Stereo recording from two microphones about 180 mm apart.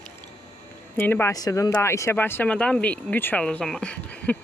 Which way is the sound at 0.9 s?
10° left (ahead or behind).